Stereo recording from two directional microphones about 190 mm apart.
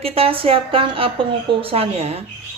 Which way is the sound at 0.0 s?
30° right (ahead or behind).